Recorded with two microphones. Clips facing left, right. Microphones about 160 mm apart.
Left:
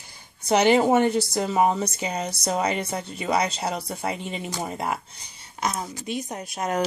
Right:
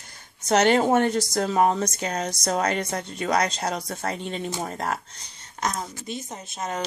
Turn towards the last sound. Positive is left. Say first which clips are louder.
# left 4 dB
turn(degrees=10)  # may be behind; listen again after turning